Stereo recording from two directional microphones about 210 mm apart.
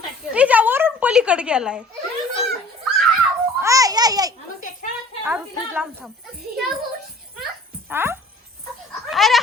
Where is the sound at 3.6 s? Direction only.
15° right (ahead or behind).